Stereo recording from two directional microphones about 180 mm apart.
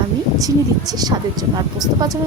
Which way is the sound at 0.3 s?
20° right (ahead or behind).